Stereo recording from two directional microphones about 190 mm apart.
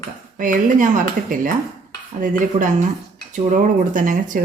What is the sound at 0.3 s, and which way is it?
Speech, 45° right (ahead or behind).